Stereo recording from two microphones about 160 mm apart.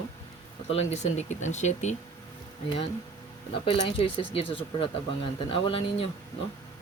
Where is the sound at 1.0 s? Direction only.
45° left (ahead or behind).